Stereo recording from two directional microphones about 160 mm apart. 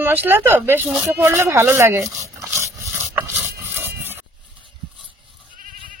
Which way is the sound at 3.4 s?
10° right (ahead or behind).